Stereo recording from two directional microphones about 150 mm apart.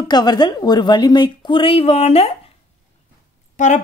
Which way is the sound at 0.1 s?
30° left (ahead or behind).